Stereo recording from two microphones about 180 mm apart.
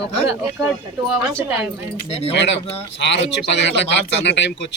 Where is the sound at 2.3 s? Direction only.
75° left (ahead or behind).